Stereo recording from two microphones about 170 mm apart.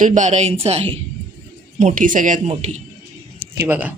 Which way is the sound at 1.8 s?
50° right (ahead or behind).